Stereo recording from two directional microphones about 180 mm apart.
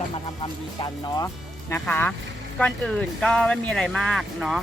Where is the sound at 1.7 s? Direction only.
10° left (ahead or behind).